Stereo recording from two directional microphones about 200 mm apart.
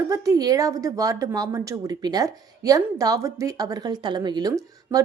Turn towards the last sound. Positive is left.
turn(degrees=-20)  # may be behind; listen again after turning